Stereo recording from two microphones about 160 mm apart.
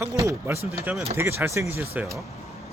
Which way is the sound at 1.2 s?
15° right (ahead or behind).